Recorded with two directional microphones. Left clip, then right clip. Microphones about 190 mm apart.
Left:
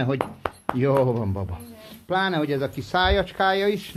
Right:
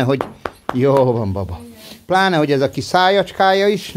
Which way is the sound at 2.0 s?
45° right (ahead or behind).